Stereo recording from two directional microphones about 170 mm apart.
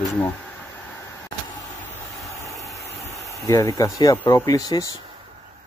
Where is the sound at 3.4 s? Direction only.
20° left (ahead or behind).